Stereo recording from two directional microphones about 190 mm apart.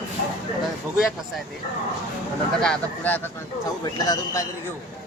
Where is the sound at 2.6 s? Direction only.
5° left (ahead or behind).